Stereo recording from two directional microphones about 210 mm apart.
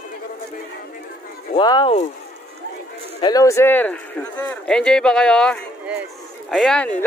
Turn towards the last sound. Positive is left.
turn(degrees=5)  # may be behind; listen again after turning